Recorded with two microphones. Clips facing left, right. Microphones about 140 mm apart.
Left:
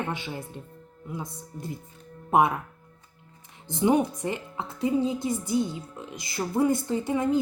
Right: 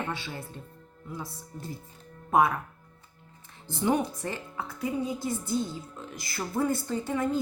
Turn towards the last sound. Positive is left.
turn(degrees=15)  # may be behind; listen again after turning